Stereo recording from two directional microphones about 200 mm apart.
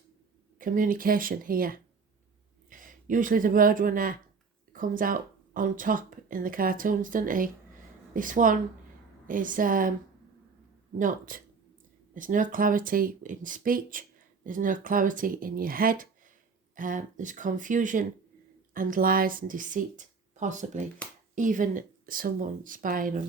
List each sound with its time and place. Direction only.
0.6 s speech: 40° right (ahead or behind)
10.9 s speech: 45° right (ahead or behind)